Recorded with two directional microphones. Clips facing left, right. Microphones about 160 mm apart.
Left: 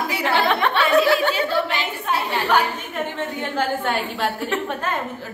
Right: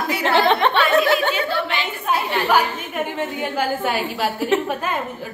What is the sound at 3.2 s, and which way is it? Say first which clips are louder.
A woman's voice: even; 10° right (ahead or behind).